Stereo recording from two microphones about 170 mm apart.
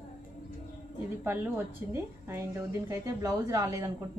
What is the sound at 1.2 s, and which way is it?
A woman's voice, 10° right (ahead or behind).